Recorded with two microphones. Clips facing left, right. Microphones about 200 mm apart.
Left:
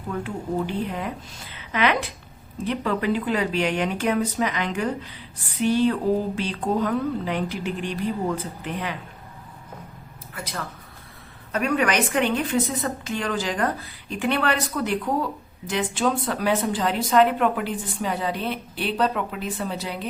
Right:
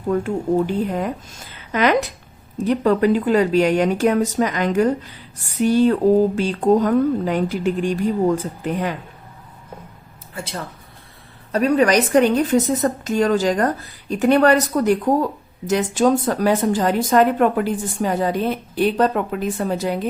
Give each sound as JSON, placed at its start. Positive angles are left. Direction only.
{"t": 0.1, "sound": "a woman's voice", "side_deg": -45}
{"t": 10.3, "sound": "a woman's voice", "side_deg": -30}